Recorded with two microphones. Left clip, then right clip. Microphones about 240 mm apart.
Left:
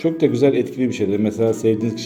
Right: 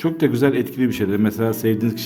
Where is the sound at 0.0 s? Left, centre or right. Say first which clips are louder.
Left 2 dB; right.